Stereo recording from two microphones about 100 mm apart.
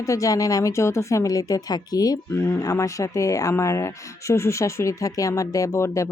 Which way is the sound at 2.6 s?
35° left (ahead or behind).